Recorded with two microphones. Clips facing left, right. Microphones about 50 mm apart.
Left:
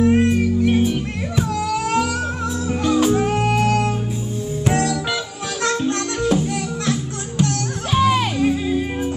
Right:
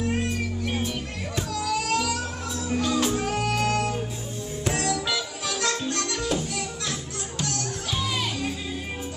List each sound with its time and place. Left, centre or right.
0.0 s music: left
1.5 s music: left
7.4 s music: left
8.4 s music: left